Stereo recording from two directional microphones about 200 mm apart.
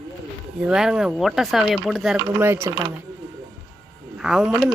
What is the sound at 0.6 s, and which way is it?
Speech, 5° right (ahead or behind).